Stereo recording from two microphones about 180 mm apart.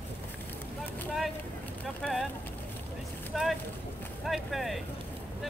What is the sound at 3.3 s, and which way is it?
Boat, centre (ahead or behind).